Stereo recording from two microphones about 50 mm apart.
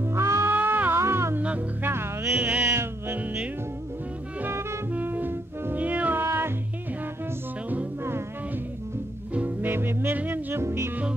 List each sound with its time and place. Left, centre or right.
0.0 s music: right
0.5 s music: right
1.0 s music: right
2.6 s music: right
4.5 s music: right
4.9 s music: right
6.1 s music: right
9.3 s music: right
9.7 s music: right
10.1 s music: right
10.5 s music: right